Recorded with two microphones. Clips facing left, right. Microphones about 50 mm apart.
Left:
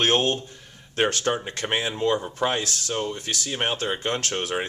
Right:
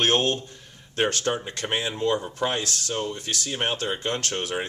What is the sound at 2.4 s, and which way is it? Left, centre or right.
Speech, left.